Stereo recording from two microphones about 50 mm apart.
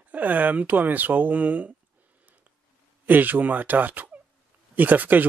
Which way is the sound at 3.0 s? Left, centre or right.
Right.